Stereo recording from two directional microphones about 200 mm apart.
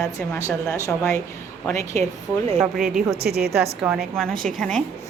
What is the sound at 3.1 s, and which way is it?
Speech, 50° right (ahead or behind).